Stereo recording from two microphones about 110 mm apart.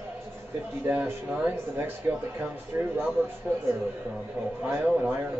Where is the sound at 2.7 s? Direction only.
25° right (ahead or behind).